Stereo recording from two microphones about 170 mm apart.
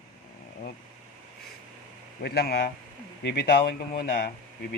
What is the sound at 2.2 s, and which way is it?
Speech, 70° left (ahead or behind).